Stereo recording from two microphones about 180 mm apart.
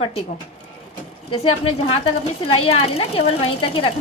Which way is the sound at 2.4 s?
30° left (ahead or behind).